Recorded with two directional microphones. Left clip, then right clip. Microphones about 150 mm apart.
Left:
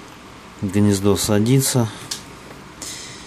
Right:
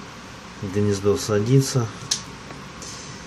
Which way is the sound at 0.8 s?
60° left (ahead or behind).